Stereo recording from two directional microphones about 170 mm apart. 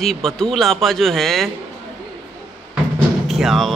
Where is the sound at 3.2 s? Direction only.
Centre (ahead or behind).